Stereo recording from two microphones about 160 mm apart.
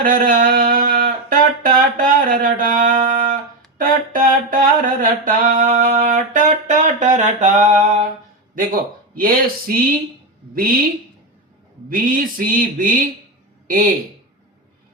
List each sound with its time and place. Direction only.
0.0 s speech: 60° right (ahead or behind)
3.8 s a sound: 55° right (ahead or behind)
8.5 s speech: 60° right (ahead or behind)
11.9 s speech: 60° right (ahead or behind)